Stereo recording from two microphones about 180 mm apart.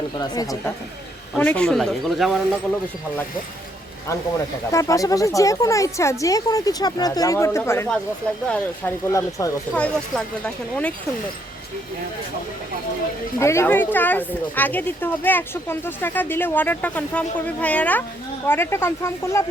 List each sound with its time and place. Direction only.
0.2 s speech: 20° left (ahead or behind)
1.4 s speech: 10° left (ahead or behind)
4.7 s speech: 15° left (ahead or behind)
9.7 s speech: 5° left (ahead or behind)
13.4 s speech: 15° left (ahead or behind)